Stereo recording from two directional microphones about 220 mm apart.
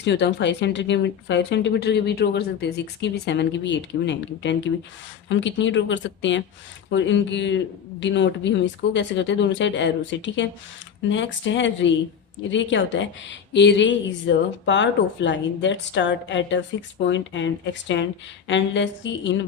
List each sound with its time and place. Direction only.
0.0 s speech: 50° left (ahead or behind)